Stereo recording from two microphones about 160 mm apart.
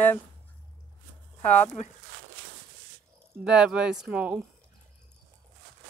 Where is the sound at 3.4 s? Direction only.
5° right (ahead or behind).